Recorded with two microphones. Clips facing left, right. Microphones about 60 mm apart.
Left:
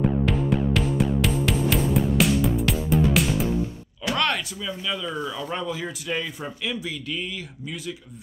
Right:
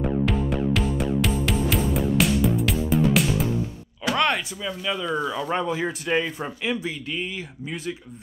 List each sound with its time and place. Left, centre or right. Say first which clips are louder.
0.2 s music: even; centre
4.1 s speech: right 2 dB; centre